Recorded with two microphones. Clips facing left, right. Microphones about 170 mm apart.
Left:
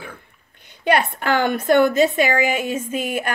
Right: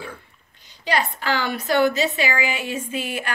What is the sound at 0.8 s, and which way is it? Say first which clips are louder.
A woman's voice: left 4 dB; 55° left (ahead or behind).